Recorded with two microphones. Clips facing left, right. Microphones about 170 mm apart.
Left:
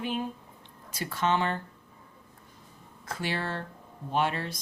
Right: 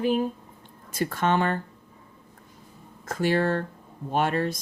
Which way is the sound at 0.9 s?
50° right (ahead or behind).